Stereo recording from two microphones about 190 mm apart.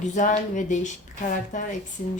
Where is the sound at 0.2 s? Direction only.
40° left (ahead or behind).